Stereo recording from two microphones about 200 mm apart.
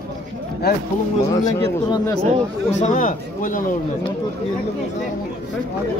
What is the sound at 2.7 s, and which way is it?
Speech, 35° left (ahead or behind).